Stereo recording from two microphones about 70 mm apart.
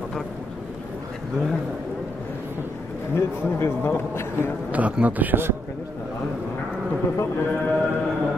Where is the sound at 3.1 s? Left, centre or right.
Left.